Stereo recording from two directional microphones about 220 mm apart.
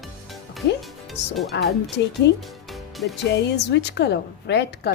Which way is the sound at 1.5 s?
50° left (ahead or behind).